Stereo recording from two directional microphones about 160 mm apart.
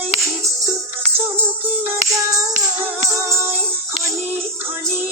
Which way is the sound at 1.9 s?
20° right (ahead or behind).